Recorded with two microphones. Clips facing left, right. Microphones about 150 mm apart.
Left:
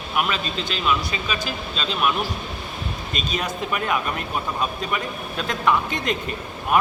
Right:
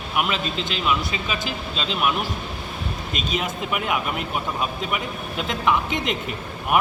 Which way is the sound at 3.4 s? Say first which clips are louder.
Left 1 dB; 15° right (ahead or behind).